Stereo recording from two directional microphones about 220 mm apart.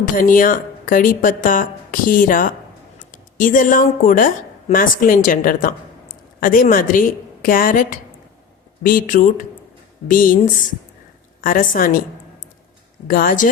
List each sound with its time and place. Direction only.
0.0 s a woman's voice: 40° left (ahead or behind)
13.1 s a woman's voice: 40° left (ahead or behind)